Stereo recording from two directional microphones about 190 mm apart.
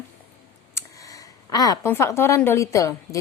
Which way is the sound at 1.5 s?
20° left (ahead or behind).